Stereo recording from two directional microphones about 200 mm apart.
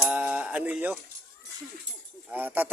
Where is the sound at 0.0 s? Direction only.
10° right (ahead or behind).